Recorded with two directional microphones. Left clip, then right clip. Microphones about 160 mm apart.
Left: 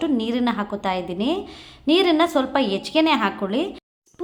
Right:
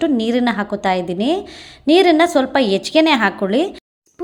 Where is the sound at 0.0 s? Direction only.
30° right (ahead or behind).